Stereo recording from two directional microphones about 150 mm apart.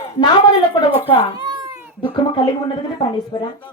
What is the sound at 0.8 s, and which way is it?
Speech, 30° left (ahead or behind).